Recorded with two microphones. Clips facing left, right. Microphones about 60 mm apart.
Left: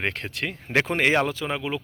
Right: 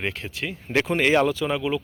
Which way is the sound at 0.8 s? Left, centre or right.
Left.